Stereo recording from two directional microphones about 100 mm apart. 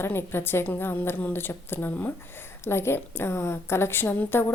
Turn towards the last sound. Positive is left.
turn(degrees=20)  # may be behind; listen again after turning